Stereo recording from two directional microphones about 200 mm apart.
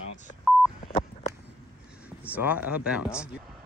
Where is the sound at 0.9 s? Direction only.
30° left (ahead or behind).